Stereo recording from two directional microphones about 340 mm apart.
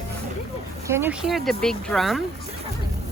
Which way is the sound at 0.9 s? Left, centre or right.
Centre.